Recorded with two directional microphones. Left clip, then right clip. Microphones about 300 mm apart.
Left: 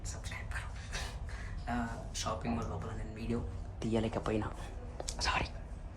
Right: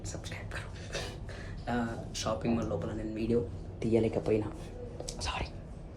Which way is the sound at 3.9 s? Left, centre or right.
Left.